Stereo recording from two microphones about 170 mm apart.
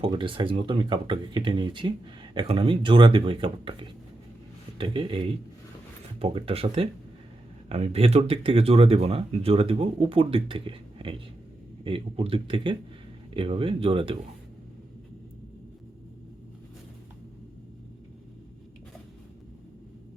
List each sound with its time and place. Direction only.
0.0 s speech: 30° right (ahead or behind)